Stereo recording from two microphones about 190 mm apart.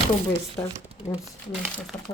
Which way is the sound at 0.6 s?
15° left (ahead or behind).